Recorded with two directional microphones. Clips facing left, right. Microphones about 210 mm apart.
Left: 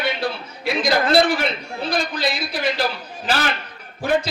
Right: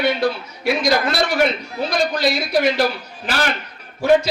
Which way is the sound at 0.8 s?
55° left (ahead or behind).